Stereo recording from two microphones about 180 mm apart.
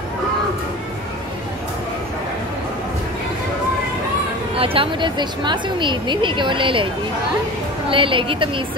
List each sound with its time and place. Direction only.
4.6 s a woman's voice: 30° right (ahead or behind)
7.9 s a woman's voice: 30° right (ahead or behind)